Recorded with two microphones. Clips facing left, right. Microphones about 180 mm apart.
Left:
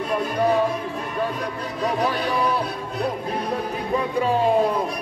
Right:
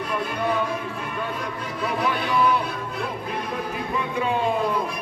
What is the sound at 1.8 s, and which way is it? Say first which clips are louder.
Music: left 2 dB; 40° left (ahead or behind).